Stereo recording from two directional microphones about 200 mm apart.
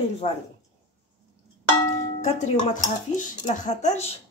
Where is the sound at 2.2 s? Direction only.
35° left (ahead or behind).